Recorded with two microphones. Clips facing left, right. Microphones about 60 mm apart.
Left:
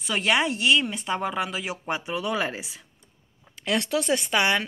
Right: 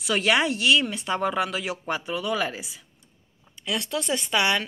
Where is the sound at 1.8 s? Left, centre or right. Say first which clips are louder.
Left 1 dB; centre.